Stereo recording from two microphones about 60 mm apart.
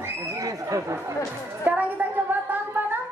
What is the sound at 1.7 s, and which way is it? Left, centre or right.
Speech, right.